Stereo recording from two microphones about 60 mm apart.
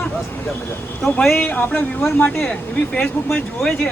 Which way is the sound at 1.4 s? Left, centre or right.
Left.